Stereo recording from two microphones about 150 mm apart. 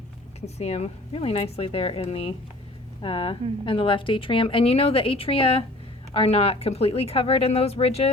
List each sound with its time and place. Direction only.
0.4 s a woman's voice: 45° left (ahead or behind)